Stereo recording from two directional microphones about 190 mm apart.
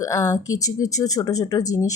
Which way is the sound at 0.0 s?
15° left (ahead or behind).